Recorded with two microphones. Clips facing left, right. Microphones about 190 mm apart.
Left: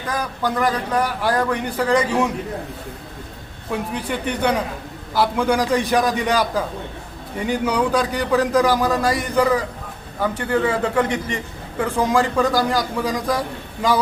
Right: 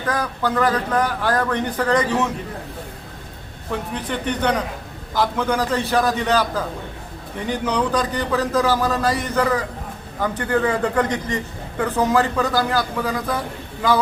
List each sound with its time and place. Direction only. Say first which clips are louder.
0.1 s a man's voice: right 1 dB; 10° left (ahead or behind)
3.7 s a man's voice: left 1 dB; 10° left (ahead or behind)